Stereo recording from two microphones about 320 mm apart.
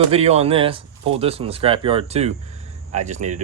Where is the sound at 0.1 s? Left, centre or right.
Centre.